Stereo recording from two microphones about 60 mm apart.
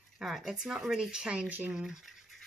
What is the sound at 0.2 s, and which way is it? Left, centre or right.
Speech, centre.